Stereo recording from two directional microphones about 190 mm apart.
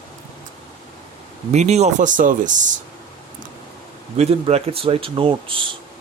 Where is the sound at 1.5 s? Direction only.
35° right (ahead or behind).